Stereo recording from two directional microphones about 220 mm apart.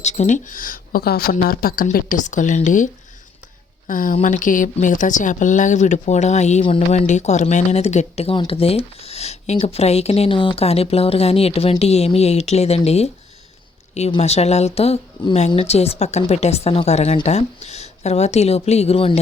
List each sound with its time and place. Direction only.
0.0 s speech: 30° left (ahead or behind)